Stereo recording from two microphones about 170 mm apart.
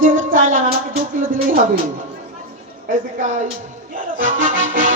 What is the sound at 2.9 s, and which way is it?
Speech, 45° right (ahead or behind).